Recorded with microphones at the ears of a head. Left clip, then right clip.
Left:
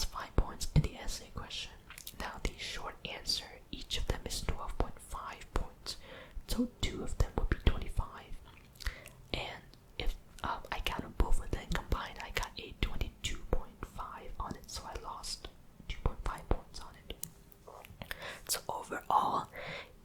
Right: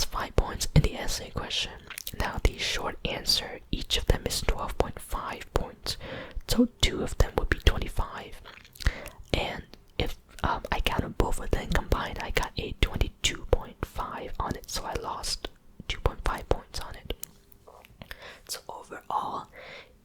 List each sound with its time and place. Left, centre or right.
0.0 s whispering: right
17.7 s whispering: centre